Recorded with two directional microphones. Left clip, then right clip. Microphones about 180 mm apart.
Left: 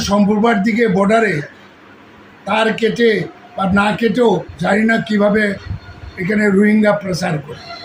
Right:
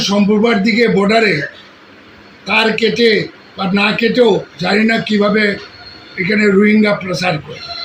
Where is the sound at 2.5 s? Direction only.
15° left (ahead or behind).